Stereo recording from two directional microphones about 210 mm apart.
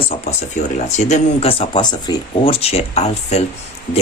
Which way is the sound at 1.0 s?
30° left (ahead or behind).